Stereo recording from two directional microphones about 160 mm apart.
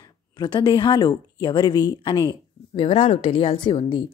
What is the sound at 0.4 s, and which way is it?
A woman's voice, 30° left (ahead or behind).